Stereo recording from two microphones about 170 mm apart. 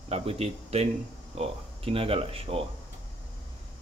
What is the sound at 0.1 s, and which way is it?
A man's voice, 35° right (ahead or behind).